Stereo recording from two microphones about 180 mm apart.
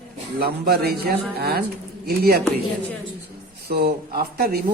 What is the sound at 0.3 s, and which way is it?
Speech, 60° right (ahead or behind).